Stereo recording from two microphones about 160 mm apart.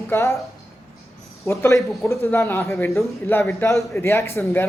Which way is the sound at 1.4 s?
15° left (ahead or behind).